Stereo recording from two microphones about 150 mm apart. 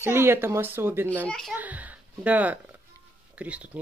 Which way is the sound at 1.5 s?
10° right (ahead or behind).